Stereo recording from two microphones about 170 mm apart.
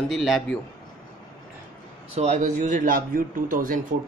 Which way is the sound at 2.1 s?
40° right (ahead or behind).